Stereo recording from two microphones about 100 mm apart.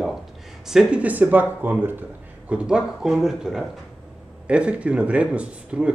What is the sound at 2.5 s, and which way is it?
Speech, 10° right (ahead or behind).